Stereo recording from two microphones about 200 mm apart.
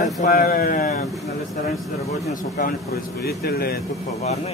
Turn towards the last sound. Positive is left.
turn(degrees=50)  # may be behind; listen again after turning